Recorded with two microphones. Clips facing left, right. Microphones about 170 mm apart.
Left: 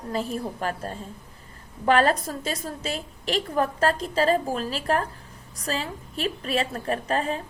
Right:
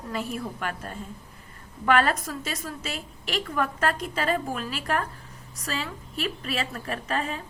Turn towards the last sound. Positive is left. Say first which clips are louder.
# left 4 dB
turn(degrees=35)  # may be behind; listen again after turning